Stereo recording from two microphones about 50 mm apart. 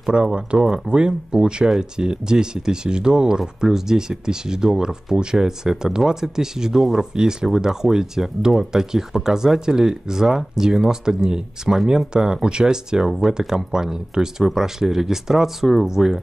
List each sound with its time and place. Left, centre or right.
0.0 s speech: centre